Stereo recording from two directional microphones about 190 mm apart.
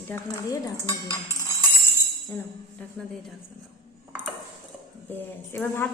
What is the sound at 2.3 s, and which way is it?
Speech, 5° left (ahead or behind).